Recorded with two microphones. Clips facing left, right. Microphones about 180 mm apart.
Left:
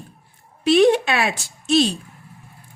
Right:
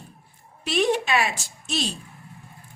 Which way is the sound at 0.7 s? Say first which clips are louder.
Left 7 dB; 75° left (ahead or behind).